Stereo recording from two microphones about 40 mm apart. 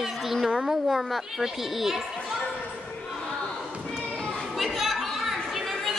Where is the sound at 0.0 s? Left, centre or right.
Centre.